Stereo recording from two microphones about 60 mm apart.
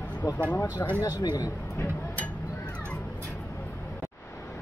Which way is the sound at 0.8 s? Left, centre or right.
Left.